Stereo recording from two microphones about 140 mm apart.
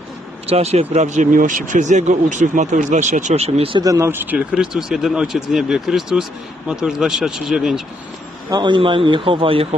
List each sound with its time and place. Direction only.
0.5 s speech: 50° right (ahead or behind)
3.8 s speech: 20° right (ahead or behind); by 7.8 s 5° right (ahead or behind)
8.5 s a man's voice: 30° right (ahead or behind)